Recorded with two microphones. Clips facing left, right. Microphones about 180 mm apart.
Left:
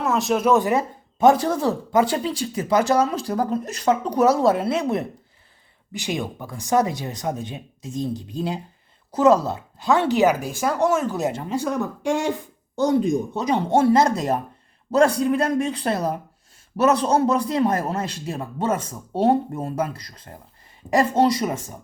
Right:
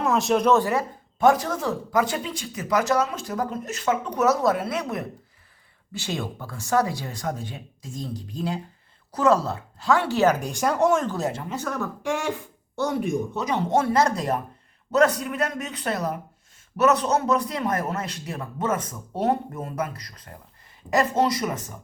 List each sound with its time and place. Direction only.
0.0 s speech: centre (ahead or behind)
0.5 s speech: 20° left (ahead or behind)
11.3 s speech: 20° left (ahead or behind)
13.3 s speech: 30° left (ahead or behind)